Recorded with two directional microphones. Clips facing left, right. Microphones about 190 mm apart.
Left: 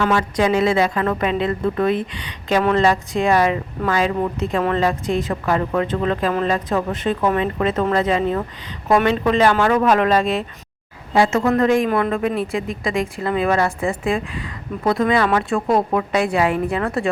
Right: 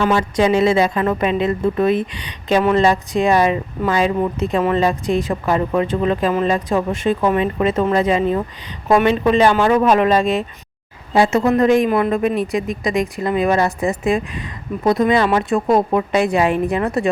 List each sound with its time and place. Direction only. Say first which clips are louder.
0.0 s speech: right 2 dB; 20° right (ahead or behind)